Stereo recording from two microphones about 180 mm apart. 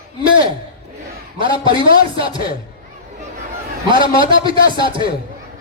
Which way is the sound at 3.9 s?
25° right (ahead or behind).